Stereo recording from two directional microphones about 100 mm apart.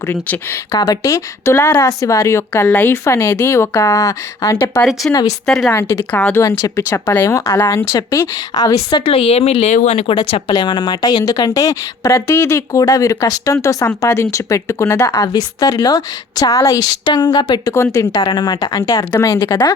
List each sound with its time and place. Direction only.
0.7 s speech: 35° left (ahead or behind)
5.5 s a woman's voice: 5° left (ahead or behind)
5.7 s speech: 25° left (ahead or behind)
6.1 s speech: 15° left (ahead or behind)
6.3 s speech: 35° left (ahead or behind)
8.5 s speech: 40° left (ahead or behind)
9.0 s speech: 80° left
10.5 s speech: 45° left (ahead or behind)